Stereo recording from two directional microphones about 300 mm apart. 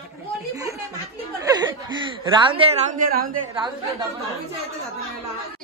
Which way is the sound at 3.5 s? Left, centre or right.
Centre.